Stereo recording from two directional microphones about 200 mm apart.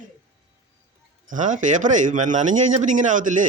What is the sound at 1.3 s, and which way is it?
Speech, 40° right (ahead or behind).